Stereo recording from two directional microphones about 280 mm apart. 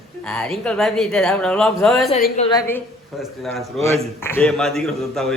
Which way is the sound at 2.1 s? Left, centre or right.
Left.